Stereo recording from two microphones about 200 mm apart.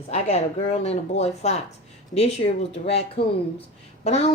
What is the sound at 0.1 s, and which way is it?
Speech, 35° left (ahead or behind).